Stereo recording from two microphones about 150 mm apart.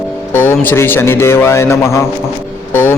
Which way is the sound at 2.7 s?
15° left (ahead or behind).